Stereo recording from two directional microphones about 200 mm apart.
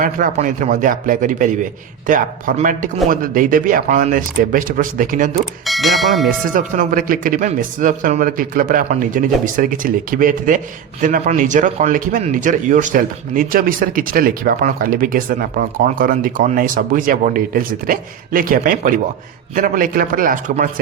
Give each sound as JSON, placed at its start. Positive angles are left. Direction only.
{"t": 0.0, "sound": "a man's voice", "side_deg": -40}
{"t": 5.6, "sound": "speech", "side_deg": 0}
{"t": 6.5, "sound": "speech", "side_deg": -40}